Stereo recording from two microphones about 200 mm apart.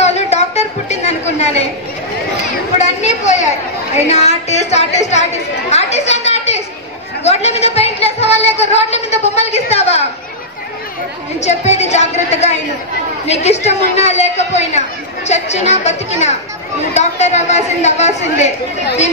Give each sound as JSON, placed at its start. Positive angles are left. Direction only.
{"t": 0.0, "sound": "chatter", "side_deg": 35}
{"t": 2.8, "sound": "a woman's voice", "side_deg": 35}
{"t": 5.7, "sound": "a sound", "side_deg": 35}
{"t": 7.2, "sound": "a woman's voice", "side_deg": 30}
{"t": 11.4, "sound": "a woman's voice", "side_deg": 35}